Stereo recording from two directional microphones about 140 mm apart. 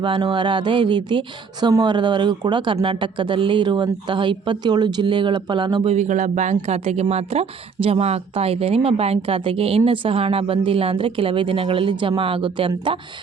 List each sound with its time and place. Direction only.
0.0 s speech: 35° right (ahead or behind)
5.9 s speech: 60° right (ahead or behind); by 13.0 s 35° right (ahead or behind)